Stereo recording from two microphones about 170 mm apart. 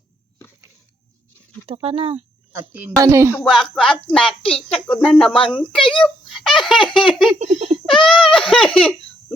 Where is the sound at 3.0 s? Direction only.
15° right (ahead or behind).